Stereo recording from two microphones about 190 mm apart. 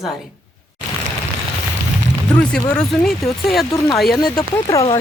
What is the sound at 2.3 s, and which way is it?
Speech, 5° left (ahead or behind).